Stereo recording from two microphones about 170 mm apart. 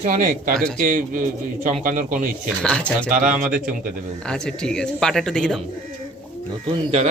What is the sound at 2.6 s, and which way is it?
Speech, 5° left (ahead or behind).